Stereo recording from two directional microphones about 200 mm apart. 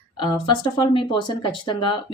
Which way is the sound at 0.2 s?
25° left (ahead or behind).